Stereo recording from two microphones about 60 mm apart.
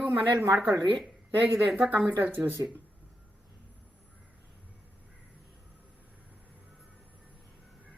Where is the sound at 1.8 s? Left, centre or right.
Right.